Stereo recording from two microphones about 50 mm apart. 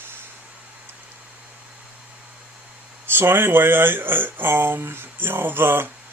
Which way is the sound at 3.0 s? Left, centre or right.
Right.